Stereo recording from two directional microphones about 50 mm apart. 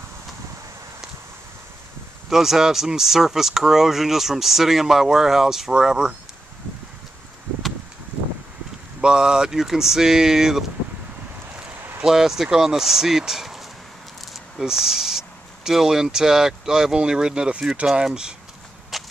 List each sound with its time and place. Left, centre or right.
2.2 s speech: centre
9.0 s speech: centre
12.0 s speech: centre
18.9 s a sound: centre